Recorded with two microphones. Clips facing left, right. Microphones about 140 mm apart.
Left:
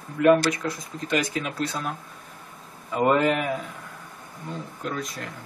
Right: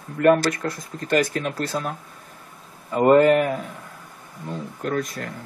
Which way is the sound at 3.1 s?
45° right (ahead or behind).